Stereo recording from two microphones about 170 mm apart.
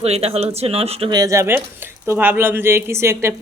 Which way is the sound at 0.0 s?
35° right (ahead or behind).